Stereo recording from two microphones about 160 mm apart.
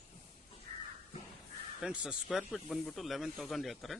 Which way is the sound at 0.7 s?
50° right (ahead or behind).